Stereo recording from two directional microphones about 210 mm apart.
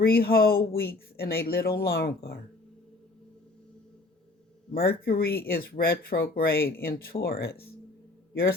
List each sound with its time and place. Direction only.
0.0 s speech: 45° left (ahead or behind)
4.7 s a man's voice: 45° left (ahead or behind)